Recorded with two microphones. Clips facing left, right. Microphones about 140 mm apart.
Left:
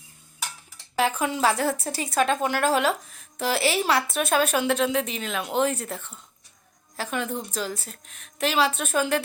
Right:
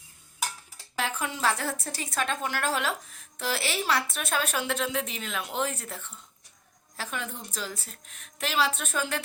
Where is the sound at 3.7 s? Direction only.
90° left.